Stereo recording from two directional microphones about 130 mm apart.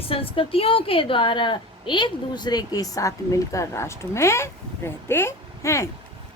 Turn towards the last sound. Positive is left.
turn(degrees=20)  # may be behind; listen again after turning